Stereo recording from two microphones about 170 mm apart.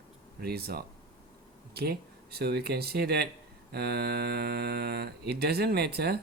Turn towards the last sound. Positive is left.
turn(degrees=-70)  # may be behind; listen again after turning